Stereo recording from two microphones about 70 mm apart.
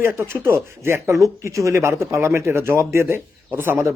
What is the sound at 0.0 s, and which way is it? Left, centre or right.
Speech, right.